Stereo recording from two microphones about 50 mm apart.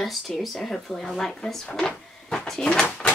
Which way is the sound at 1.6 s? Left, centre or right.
Centre.